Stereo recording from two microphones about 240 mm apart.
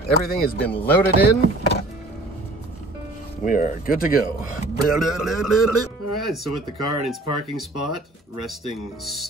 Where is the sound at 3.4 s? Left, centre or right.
Left.